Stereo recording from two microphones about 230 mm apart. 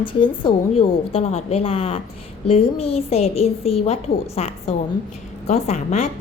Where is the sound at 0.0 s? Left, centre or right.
Left.